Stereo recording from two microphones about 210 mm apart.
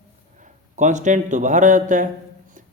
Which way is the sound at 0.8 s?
35° right (ahead or behind).